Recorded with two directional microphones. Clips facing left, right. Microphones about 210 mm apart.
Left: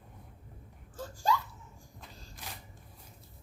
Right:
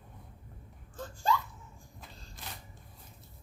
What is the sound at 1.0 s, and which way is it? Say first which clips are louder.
Laughter: left 1 dB; 10° left (ahead or behind).